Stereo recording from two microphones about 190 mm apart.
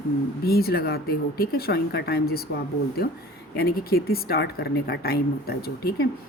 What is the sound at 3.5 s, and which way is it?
Speech, 55° left (ahead or behind).